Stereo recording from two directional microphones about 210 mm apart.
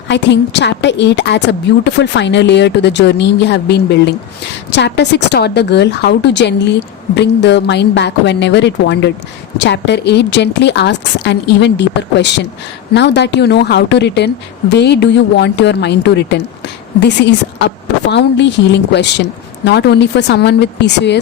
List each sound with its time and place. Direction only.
0.1 s a woman's voice: 55° left (ahead or behind)